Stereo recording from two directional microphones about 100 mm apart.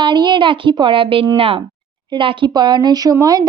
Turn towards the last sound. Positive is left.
turn(degrees=-40)  # may be behind; listen again after turning